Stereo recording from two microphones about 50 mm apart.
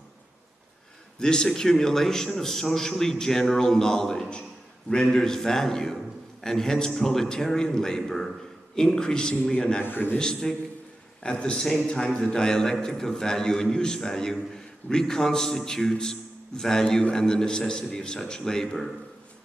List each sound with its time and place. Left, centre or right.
1.2 s a man's voice: centre
9.8 s a man's voice: left
10.1 s a man's voice: centre